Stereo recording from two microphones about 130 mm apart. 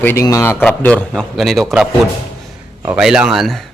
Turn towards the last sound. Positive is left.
turn(degrees=0)  # may be behind; listen again after turning